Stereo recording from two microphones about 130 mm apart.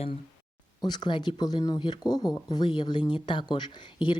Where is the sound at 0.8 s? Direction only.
35° left (ahead or behind).